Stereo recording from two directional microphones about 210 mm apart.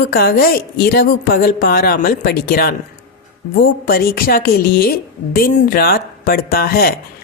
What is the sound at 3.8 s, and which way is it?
Speech, 45° left (ahead or behind).